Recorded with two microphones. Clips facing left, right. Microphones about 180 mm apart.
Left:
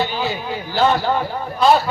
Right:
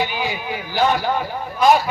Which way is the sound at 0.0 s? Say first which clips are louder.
Left 2 dB; 15° right (ahead or behind).